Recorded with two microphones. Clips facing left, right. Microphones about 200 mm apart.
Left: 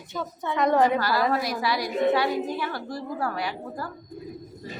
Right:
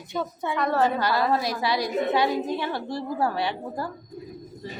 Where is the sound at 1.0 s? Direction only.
25° right (ahead or behind).